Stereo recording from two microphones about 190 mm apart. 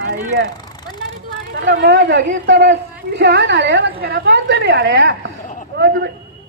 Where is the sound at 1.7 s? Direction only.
65° right (ahead or behind).